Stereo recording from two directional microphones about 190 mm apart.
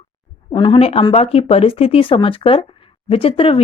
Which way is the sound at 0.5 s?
25° left (ahead or behind).